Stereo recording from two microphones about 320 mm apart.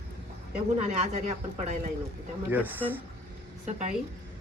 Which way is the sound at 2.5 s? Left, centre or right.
Centre.